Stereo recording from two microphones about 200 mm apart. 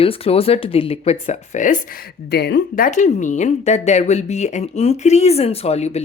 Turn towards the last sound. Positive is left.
turn(degrees=30)  # may be behind; listen again after turning